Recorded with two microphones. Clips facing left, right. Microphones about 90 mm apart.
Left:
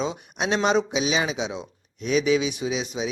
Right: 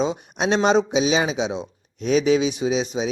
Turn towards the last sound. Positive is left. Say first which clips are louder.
# right 5 dB
turn(degrees=-30)  # may be behind; listen again after turning